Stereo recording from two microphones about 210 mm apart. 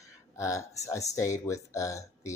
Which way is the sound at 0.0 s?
15° left (ahead or behind).